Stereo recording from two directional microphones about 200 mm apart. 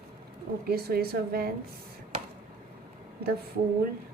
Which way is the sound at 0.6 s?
50° right (ahead or behind).